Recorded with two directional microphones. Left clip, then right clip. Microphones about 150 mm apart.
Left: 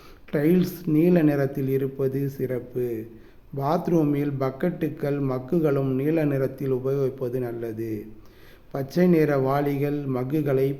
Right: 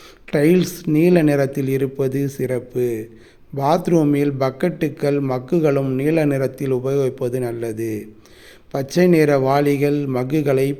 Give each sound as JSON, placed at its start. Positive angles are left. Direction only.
{"t": 0.3, "sound": "a man's voice", "side_deg": -35}